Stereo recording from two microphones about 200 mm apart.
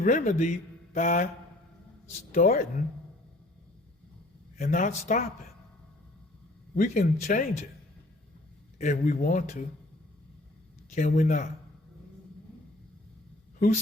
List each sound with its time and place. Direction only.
0.0 s a man's voice: 40° left (ahead or behind)
2.3 s speech: 40° left (ahead or behind)
4.5 s a man's voice: 45° left (ahead or behind)
6.7 s speech: 40° left (ahead or behind)
8.8 s speech: 40° left (ahead or behind)
10.9 s speech: 40° left (ahead or behind)